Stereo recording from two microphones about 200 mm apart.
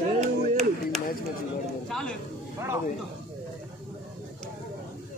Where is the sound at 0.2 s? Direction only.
35° right (ahead or behind).